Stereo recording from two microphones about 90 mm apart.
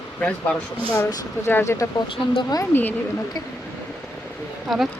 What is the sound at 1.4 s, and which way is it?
Speech, 25° left (ahead or behind).